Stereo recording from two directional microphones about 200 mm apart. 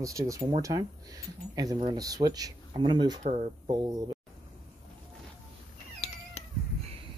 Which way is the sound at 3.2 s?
35° right (ahead or behind).